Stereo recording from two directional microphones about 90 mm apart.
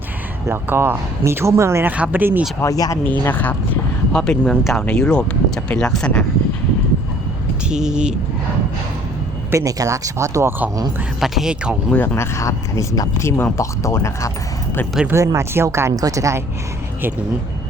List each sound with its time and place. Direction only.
0.4 s speech: 25° right (ahead or behind)
1.9 s speech: 20° right (ahead or behind)
2.6 s speech: 40° left (ahead or behind)
3.0 s speech: 20° left (ahead or behind)
4.1 s speech: 5° left (ahead or behind)
7.7 s speech: 10° right (ahead or behind)
9.5 s speech: 40° right (ahead or behind)
11.2 s speech: 5° right (ahead or behind)
11.9 s speech: 20° left (ahead or behind)
12.1 s speech: 30° left (ahead or behind)
15.1 s speech: 35° right (ahead or behind)